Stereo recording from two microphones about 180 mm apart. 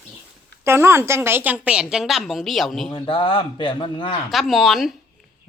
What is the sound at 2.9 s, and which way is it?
Speech, 30° left (ahead or behind).